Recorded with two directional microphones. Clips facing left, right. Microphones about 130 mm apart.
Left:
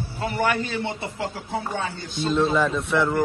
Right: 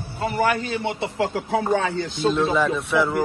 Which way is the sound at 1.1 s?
90° right.